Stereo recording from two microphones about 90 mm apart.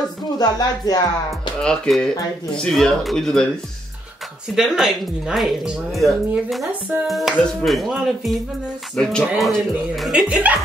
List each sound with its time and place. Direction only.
0.4 s speech: 45° left (ahead or behind)
1.6 s speech: 10° left (ahead or behind)
4.6 s speech: 5° right (ahead or behind)
6.7 s music: 20° right (ahead or behind)
7.1 s speech: centre (ahead or behind)
8.9 s speech: 5° left (ahead or behind)
10.1 s speech: 15° right (ahead or behind)